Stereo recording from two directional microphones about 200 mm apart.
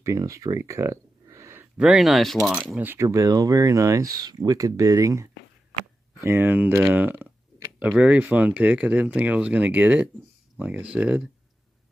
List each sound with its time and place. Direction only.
0.0 s speech: 15° right (ahead or behind)